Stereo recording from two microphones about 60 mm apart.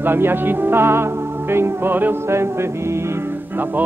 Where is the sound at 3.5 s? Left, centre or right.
Right.